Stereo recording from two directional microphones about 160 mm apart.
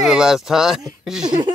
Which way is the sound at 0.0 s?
5° right (ahead or behind).